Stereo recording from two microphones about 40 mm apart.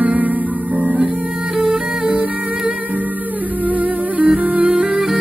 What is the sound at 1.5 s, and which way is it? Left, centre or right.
Music, right.